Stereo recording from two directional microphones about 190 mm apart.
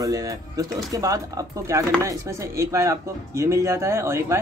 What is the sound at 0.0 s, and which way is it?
Speech, 20° right (ahead or behind).